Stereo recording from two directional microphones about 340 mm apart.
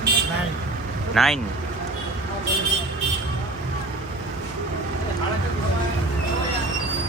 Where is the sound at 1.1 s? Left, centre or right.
Centre.